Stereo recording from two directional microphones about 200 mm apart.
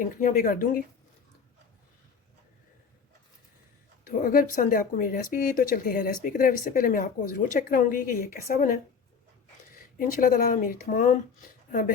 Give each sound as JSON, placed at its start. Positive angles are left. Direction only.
{"t": 0.0, "sound": "speech", "side_deg": 40}
{"t": 4.2, "sound": "speech", "side_deg": 45}
{"t": 10.0, "sound": "speech", "side_deg": 45}